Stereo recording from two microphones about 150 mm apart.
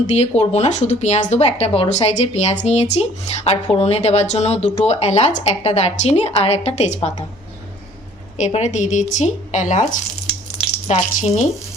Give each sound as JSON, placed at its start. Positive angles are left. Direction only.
{"t": 0.1, "sound": "speech", "side_deg": 45}
{"t": 8.4, "sound": "speech", "side_deg": 50}